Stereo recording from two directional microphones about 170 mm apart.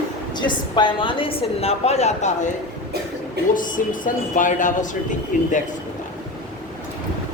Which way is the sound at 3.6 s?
50° left (ahead or behind).